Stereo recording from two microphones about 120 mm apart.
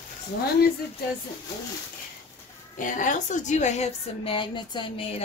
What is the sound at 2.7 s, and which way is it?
A woman's voice, 90° left.